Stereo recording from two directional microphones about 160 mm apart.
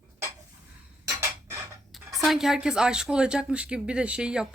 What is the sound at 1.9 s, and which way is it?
A woman's voice, centre (ahead or behind).